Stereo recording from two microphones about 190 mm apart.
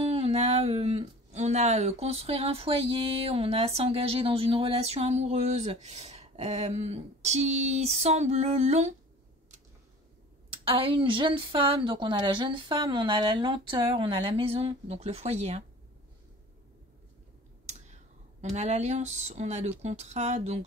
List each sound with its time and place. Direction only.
0.0 s speech: 35° right (ahead or behind)
10.5 s a woman's voice: 30° right (ahead or behind)
17.6 s speech: 35° right (ahead or behind)